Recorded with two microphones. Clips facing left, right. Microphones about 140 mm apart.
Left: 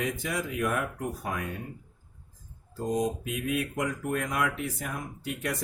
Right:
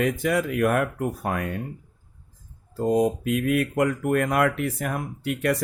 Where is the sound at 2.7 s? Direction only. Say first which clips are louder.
Right 7 dB; 65° right (ahead or behind).